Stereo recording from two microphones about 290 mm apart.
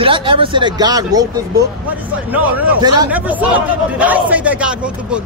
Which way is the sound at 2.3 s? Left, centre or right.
Centre.